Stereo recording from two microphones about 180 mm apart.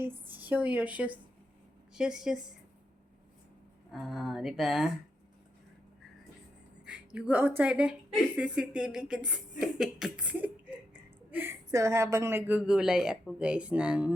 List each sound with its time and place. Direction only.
0.3 s a woman's voice: 10° right (ahead or behind)
3.9 s a woman's voice: centre (ahead or behind)
6.8 s a woman's voice: 5° right (ahead or behind)